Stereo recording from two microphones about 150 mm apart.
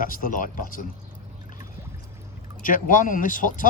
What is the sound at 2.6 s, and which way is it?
Speech, 60° left (ahead or behind).